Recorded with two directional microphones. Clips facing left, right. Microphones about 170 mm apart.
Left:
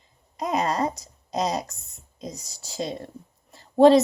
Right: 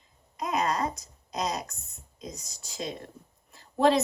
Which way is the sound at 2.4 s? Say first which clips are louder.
Left 7 dB; 30° left (ahead or behind).